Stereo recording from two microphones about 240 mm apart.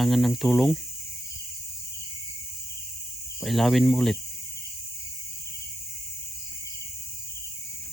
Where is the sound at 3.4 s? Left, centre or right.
Centre.